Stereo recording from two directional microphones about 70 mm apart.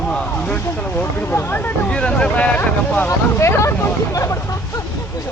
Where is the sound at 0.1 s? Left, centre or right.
Centre.